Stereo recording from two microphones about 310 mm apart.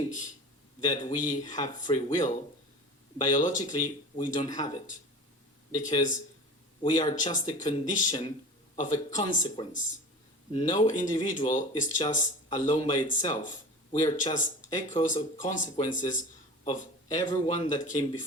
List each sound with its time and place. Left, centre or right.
0.9 s speech: left
3.3 s speech: left